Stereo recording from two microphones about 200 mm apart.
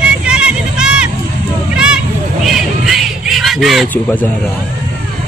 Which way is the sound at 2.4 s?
Centre (ahead or behind).